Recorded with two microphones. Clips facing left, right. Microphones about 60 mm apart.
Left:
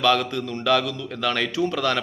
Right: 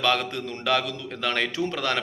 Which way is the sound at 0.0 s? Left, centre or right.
Right.